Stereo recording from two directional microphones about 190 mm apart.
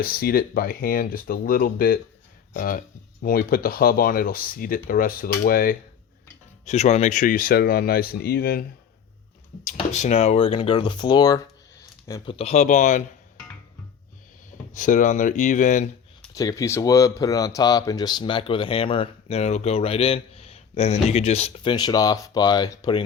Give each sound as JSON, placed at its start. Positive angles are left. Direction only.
{"t": 0.0, "sound": "speech", "side_deg": 50}
{"t": 6.7, "sound": "speech", "side_deg": 35}
{"t": 9.6, "sound": "speech", "side_deg": 40}
{"t": 12.3, "sound": "speech", "side_deg": 35}
{"t": 14.8, "sound": "speech", "side_deg": 45}
{"t": 16.3, "sound": "speech", "side_deg": 20}